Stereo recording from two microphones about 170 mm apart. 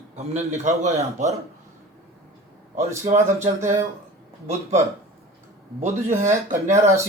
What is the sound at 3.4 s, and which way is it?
Speech, 15° right (ahead or behind).